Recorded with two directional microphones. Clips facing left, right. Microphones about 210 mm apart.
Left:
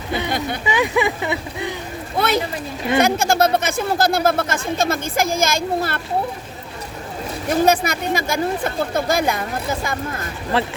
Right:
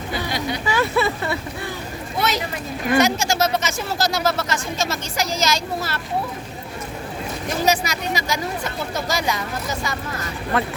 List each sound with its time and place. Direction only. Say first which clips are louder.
0.6 s speech: left 1 dB; 15° left (ahead or behind)
2.1 s speech: left 4 dB; 55° left (ahead or behind)
7.6 s speech: left 4 dB; 55° left (ahead or behind)
10.5 s a man's voice: left 2 dB; 30° left (ahead or behind)